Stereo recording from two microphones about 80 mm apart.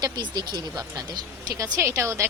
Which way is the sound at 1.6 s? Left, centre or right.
Right.